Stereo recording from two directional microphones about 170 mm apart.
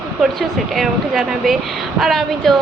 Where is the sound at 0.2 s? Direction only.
Centre (ahead or behind).